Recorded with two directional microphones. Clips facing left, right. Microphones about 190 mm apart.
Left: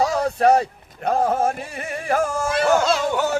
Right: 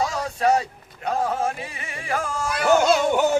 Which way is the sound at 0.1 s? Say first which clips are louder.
Left 4 dB; 55° left (ahead or behind).